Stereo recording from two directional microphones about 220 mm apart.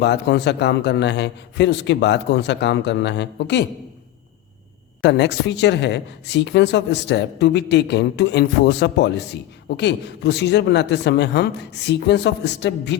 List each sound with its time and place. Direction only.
0.0 s speech: 50° left (ahead or behind)
5.0 s speech: 50° left (ahead or behind)